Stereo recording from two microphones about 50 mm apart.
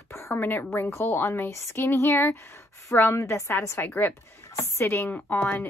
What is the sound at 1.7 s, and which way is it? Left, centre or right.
Speech, left.